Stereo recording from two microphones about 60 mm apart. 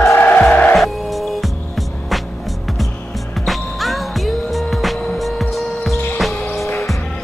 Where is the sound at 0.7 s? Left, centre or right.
Centre.